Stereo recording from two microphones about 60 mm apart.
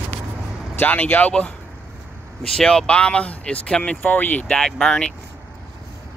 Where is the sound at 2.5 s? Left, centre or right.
Centre.